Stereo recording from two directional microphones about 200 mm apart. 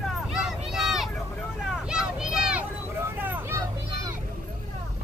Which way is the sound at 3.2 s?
10° right (ahead or behind).